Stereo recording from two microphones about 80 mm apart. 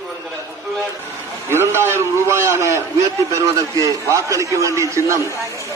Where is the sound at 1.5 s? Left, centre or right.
Right.